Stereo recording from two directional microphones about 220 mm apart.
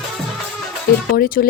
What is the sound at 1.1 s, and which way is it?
Speech, 40° left (ahead or behind).